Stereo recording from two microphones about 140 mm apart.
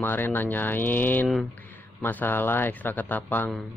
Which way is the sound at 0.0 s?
15° left (ahead or behind).